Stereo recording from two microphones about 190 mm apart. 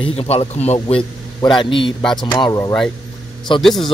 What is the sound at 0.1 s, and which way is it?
A man's voice, 30° left (ahead or behind).